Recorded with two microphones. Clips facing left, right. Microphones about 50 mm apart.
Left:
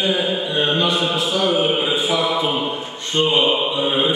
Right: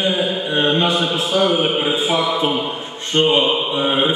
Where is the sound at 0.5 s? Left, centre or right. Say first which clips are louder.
Right 3 dB; right.